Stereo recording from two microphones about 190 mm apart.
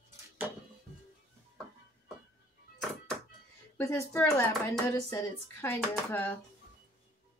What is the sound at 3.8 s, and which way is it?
Speech, 10° left (ahead or behind).